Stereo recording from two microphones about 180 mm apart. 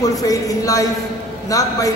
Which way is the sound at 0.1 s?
20° left (ahead or behind).